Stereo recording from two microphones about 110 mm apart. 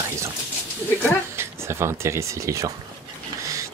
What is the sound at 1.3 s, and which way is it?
Speech, 25° right (ahead or behind).